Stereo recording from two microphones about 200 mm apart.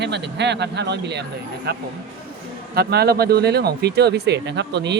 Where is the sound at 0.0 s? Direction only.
60° right (ahead or behind).